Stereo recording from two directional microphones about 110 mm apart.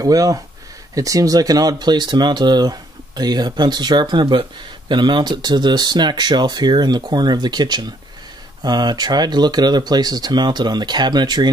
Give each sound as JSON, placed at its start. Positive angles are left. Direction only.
{"t": 0.0, "sound": "speech", "side_deg": -35}